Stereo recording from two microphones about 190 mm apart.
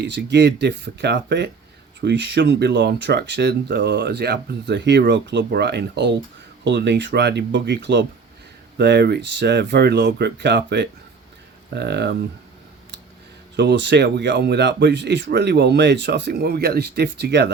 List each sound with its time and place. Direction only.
0.0 s speech: 65° right (ahead or behind)
13.6 s speech: 65° right (ahead or behind)